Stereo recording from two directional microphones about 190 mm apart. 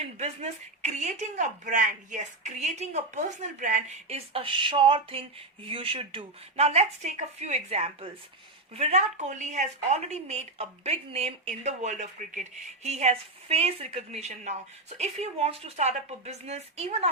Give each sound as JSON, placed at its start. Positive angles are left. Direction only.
{"t": 0.2, "sound": "speech", "side_deg": -35}